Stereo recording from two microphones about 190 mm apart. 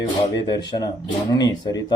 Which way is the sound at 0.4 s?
20° left (ahead or behind).